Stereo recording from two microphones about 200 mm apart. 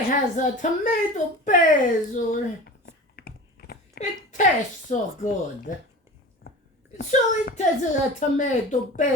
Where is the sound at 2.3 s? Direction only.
45° left (ahead or behind).